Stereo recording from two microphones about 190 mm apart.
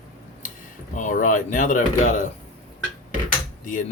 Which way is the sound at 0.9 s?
40° left (ahead or behind).